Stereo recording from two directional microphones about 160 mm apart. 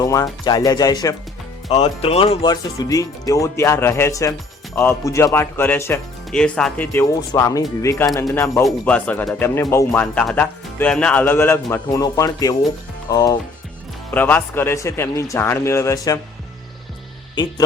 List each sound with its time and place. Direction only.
0.0 s speech: 25° left (ahead or behind)
1.7 s speech: 40° left (ahead or behind); by 8.2 s 20° left (ahead or behind)
8.8 s speech: 10° left (ahead or behind); by 13.4 s 25° left (ahead or behind)
14.1 s speech: 10° left (ahead or behind)